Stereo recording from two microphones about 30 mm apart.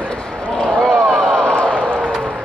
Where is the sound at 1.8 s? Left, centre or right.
Right.